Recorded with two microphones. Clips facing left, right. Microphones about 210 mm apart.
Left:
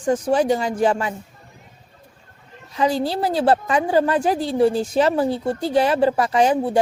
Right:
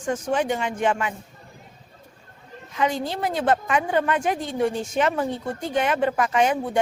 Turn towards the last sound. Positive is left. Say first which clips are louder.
# left 4 dB
turn(degrees=35)  # may be behind; listen again after turning